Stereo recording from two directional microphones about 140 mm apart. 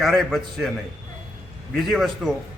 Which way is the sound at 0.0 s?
Centre (ahead or behind).